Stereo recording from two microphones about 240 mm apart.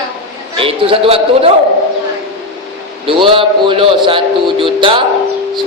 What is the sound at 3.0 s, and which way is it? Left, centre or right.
A man's voice, right.